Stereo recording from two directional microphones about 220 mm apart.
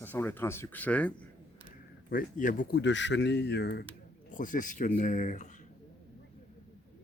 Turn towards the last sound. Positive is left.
turn(degrees=35)  # may be behind; listen again after turning